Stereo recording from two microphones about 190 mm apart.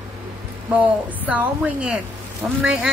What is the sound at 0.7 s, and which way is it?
A woman's voice, 10° right (ahead or behind).